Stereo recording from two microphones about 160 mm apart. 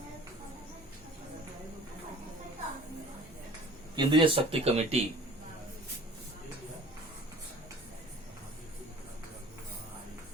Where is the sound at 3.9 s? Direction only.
30° right (ahead or behind).